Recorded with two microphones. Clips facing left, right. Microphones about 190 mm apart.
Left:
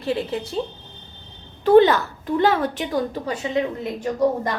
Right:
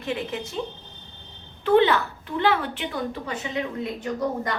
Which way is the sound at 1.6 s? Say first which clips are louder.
Left 5 dB; 40° left (ahead or behind).